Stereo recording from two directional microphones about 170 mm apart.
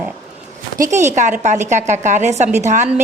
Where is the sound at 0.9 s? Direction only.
45° right (ahead or behind).